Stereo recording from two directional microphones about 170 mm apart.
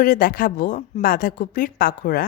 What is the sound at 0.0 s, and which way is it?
A woman's voice, 55° left (ahead or behind).